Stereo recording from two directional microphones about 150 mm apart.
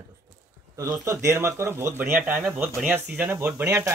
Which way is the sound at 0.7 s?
20° right (ahead or behind).